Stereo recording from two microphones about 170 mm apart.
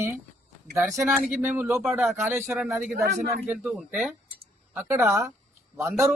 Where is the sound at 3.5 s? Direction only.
5° right (ahead or behind).